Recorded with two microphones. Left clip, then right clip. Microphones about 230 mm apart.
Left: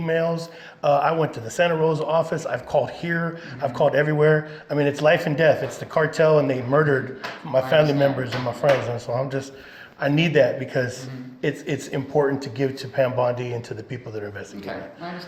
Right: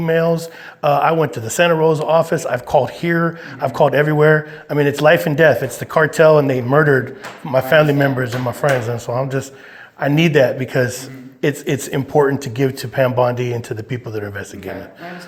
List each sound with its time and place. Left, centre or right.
0.0 s speech: right